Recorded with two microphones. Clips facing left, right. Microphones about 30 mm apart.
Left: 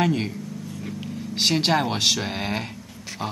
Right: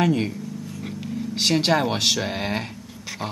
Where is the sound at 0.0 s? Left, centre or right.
Centre.